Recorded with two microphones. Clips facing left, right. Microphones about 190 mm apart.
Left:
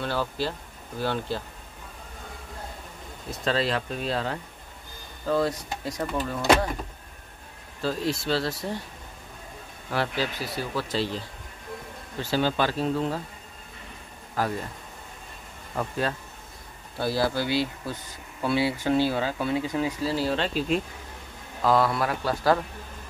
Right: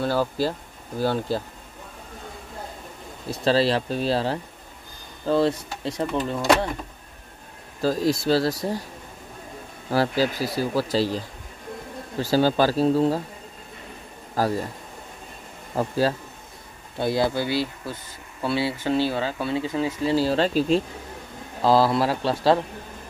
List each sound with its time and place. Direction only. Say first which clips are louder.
0.0 s speech: right 5 dB; 40° right (ahead or behind)
3.3 s speech: right 6 dB; 30° right (ahead or behind)
7.8 s speech: right 6 dB; 40° right (ahead or behind)
9.8 s speech: right 6 dB; 40° right (ahead or behind)
14.4 s speech: right 4 dB; 35° right (ahead or behind)
15.7 s speech: right 6 dB; 30° right (ahead or behind)
17.0 s speech: right 3 dB; 20° right (ahead or behind)
18.5 s speech: even; 15° left (ahead or behind)
20.1 s speech: right 5 dB; 30° right (ahead or behind)